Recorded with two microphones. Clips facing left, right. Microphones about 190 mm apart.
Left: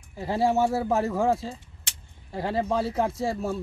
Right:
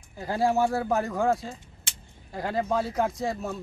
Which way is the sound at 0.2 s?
25° left (ahead or behind).